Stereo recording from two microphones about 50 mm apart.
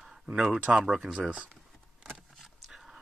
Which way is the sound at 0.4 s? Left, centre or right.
Right.